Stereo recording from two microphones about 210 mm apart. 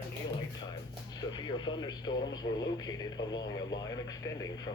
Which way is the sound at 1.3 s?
20° left (ahead or behind).